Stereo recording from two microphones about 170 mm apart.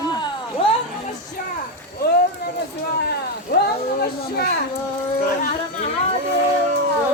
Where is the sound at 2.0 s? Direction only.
70° left (ahead or behind).